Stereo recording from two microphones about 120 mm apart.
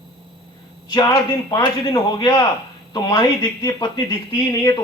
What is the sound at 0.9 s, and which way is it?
Speech, 35° left (ahead or behind).